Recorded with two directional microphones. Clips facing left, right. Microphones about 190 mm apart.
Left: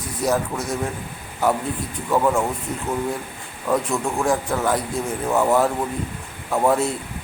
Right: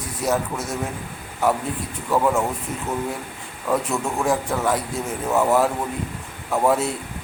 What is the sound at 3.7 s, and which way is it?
A man's voice, 5° right (ahead or behind).